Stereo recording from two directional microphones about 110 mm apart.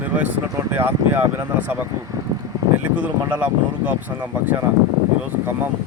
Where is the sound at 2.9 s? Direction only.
10° right (ahead or behind).